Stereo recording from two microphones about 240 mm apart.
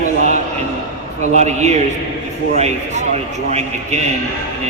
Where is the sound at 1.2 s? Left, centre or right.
Right.